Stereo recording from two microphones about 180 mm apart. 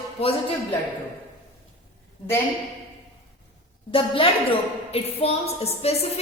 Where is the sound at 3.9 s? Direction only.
30° left (ahead or behind).